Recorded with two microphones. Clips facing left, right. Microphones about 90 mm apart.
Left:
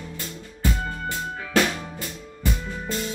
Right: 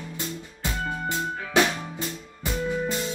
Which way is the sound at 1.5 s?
20° right (ahead or behind).